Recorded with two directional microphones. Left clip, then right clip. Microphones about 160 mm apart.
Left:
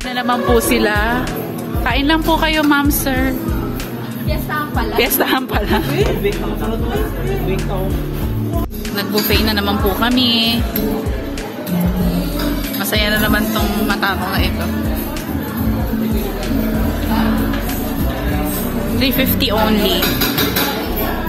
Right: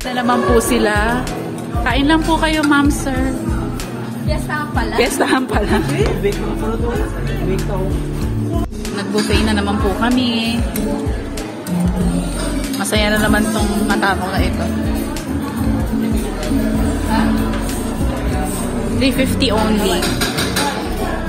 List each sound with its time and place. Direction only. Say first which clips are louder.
0.2 s speech: right 1 dB; centre (ahead or behind)
1.9 s a woman's voice: even; 20° left (ahead or behind)
4.9 s speech: even; centre (ahead or behind)
9.3 s speech: left 2 dB; centre (ahead or behind)
12.9 s music: even; 20° right (ahead or behind)
18.9 s speech: even; centre (ahead or behind)